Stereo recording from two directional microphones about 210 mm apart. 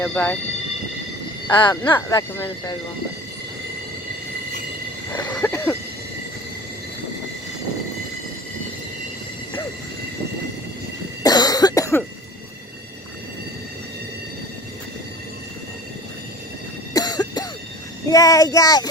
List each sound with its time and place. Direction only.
0.0 s speech: 5° left (ahead or behind)
1.5 s speech: 20° left (ahead or behind)
5.3 s a sound: 10° left (ahead or behind)
11.2 s cough: 20° left (ahead or behind)
16.9 s cough: 20° left (ahead or behind)
18.1 s speech: 15° left (ahead or behind)